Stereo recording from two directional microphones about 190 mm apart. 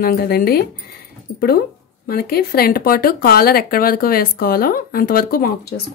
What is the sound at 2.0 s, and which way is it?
Speech, 55° left (ahead or behind).